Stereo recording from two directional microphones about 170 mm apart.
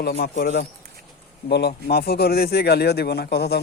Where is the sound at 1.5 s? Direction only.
70° left (ahead or behind).